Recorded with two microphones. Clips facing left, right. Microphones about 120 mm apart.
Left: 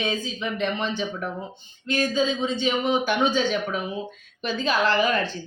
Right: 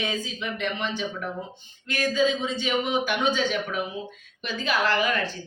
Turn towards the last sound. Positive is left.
turn(degrees=30)  # may be behind; listen again after turning